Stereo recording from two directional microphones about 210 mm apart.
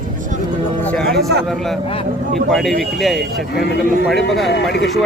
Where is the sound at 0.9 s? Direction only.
5° left (ahead or behind).